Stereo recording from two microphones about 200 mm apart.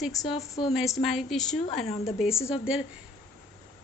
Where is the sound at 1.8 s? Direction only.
30° left (ahead or behind).